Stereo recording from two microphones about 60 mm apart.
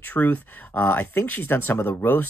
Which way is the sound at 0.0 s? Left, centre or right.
Left.